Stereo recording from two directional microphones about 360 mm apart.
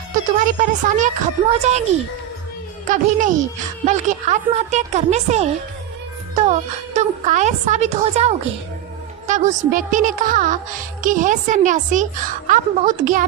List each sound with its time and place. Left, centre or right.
0.3 s speech: right
2.9 s speech: right